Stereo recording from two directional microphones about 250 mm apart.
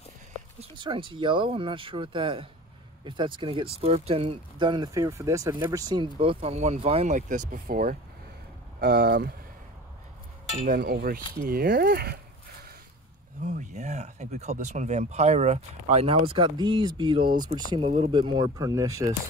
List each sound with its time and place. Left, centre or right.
0.6 s speech: centre; by 9.3 s right
10.7 s speech: right
13.4 s speech: right; by 19.1 s centre